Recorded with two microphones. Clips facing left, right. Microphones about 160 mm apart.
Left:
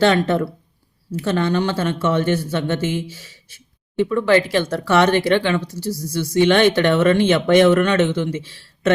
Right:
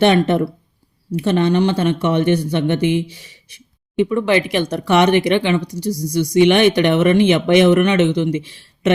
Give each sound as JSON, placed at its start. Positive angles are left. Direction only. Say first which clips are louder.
{"t": 0.0, "sound": "speech", "louder": "right 2 dB", "side_deg": -20}